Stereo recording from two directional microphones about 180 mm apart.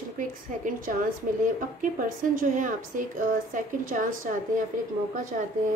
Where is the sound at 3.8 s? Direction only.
50° right (ahead or behind).